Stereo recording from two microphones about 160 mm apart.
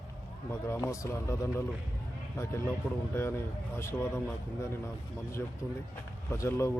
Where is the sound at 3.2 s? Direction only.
15° left (ahead or behind).